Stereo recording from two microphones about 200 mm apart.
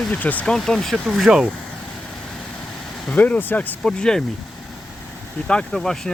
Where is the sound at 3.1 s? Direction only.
10° left (ahead or behind).